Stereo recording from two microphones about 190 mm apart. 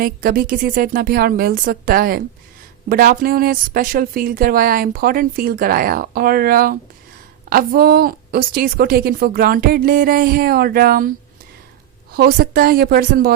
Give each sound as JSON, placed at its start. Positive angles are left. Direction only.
{"t": 0.0, "sound": "speech", "side_deg": -50}
{"t": 12.1, "sound": "speech", "side_deg": -50}